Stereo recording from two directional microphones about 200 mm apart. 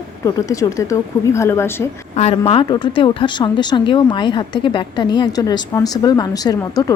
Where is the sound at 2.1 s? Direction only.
30° left (ahead or behind).